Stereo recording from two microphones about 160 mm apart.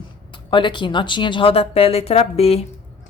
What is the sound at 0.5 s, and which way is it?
A woman's voice, 30° left (ahead or behind).